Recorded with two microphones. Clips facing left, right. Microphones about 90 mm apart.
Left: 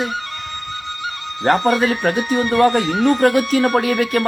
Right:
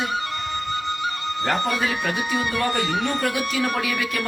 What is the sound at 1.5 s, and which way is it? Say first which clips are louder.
Speech: left 9 dB; 50° left (ahead or behind).